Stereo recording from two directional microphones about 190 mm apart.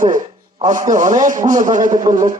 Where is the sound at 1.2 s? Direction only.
45° right (ahead or behind).